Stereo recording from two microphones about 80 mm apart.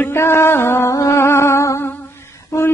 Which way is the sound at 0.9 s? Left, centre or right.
Left.